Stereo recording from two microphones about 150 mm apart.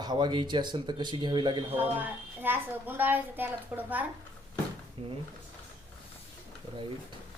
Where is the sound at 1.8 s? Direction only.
10° right (ahead or behind).